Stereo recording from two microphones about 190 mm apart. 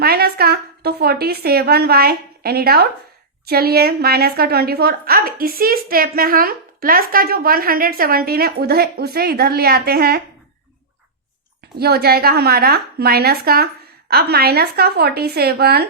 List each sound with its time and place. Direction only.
0.0 s a woman's voice: 55° right (ahead or behind)
11.8 s a woman's voice: 55° right (ahead or behind)